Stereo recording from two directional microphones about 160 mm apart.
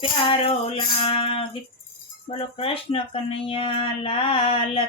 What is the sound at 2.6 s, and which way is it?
Female singing, 35° left (ahead or behind).